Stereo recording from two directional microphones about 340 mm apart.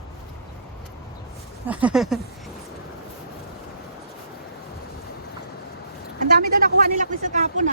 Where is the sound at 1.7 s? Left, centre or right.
Centre.